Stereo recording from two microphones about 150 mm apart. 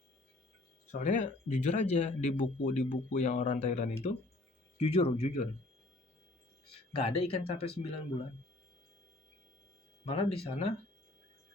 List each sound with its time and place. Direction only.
0.9 s speech: 55° left (ahead or behind)
6.7 s speech: 35° left (ahead or behind)
10.1 s speech: 40° left (ahead or behind)